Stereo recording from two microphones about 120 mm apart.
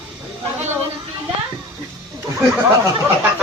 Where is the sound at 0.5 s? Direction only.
20° right (ahead or behind).